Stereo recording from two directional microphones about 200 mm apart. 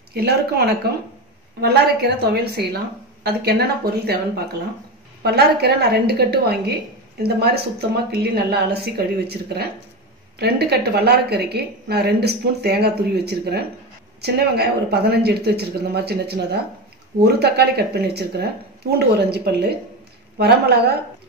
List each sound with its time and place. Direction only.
0.1 s a woman's voice: 50° right (ahead or behind)